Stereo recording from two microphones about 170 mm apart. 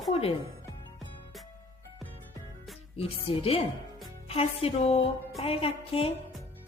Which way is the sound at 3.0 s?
35° left (ahead or behind).